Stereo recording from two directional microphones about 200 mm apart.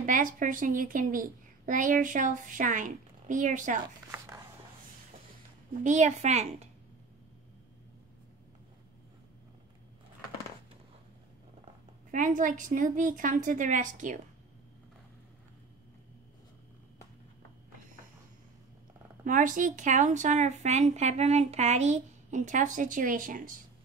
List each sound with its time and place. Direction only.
0.0 s speech: 40° right (ahead or behind)
5.7 s speech: 35° right (ahead or behind)
12.1 s speech: 40° right (ahead or behind)
19.2 s speech: 40° right (ahead or behind)